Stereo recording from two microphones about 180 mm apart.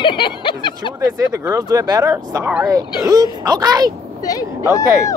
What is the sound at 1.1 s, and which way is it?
Speech, 20° right (ahead or behind).